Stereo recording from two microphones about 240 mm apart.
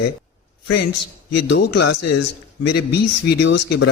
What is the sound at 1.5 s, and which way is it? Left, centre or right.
Speech, left.